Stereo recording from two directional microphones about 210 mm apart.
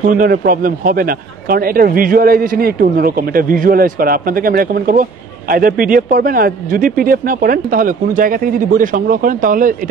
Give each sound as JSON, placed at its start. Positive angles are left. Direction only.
{"t": 0.1, "sound": "a man's voice", "side_deg": -45}